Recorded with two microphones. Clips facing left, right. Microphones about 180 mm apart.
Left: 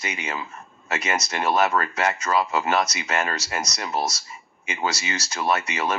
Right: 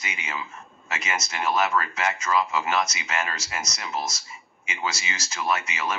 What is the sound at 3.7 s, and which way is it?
Speech, 50° left (ahead or behind).